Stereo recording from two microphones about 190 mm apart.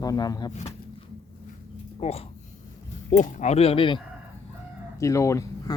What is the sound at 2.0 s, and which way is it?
Speech, 35° left (ahead or behind).